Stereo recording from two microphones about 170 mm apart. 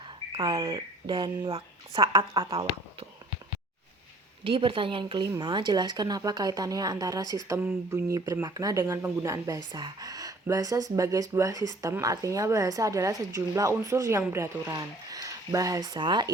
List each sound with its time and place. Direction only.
0.4 s speech: 20° right (ahead or behind)
4.4 s speech: 30° right (ahead or behind)